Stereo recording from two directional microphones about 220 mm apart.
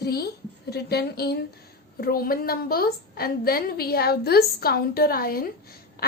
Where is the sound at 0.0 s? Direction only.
45° left (ahead or behind).